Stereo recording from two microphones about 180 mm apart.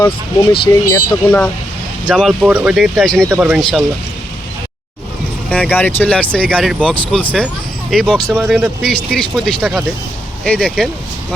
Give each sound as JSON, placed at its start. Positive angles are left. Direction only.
{"t": 0.7, "sound": "speech", "side_deg": 15}
{"t": 2.0, "sound": "speech", "side_deg": -5}
{"t": 3.2, "sound": "speech", "side_deg": -15}
{"t": 3.6, "sound": "speech", "side_deg": 5}
{"t": 5.5, "sound": "speech", "side_deg": 10}